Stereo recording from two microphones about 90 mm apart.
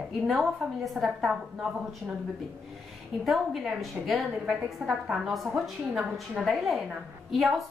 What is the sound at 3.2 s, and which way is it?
A woman's voice, centre (ahead or behind).